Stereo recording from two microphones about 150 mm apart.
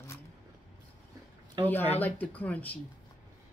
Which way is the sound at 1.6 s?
30° right (ahead or behind).